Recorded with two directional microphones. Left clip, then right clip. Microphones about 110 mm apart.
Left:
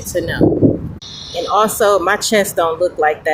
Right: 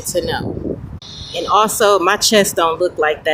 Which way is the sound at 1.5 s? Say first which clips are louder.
Even; 35° right (ahead or behind).